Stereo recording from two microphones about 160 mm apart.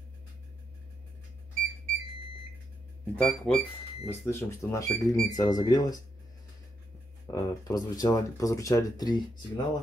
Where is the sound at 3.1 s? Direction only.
10° left (ahead or behind); by 6.0 s 25° left (ahead or behind).